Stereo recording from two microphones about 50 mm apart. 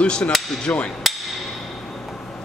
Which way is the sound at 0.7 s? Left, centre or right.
Left.